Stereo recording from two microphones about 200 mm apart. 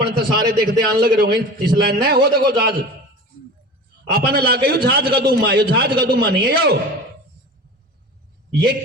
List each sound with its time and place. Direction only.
0.0 s a man's voice: 20° right (ahead or behind)
0.6 s a man's voice: 50° right (ahead or behind)
4.1 s a man's voice: 50° right (ahead or behind)
8.5 s a man's voice: 55° right (ahead or behind)